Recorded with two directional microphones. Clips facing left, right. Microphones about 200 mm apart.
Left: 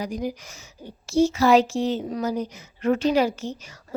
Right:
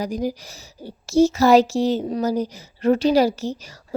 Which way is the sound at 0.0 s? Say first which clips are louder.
Right 4 dB; 40° right (ahead or behind).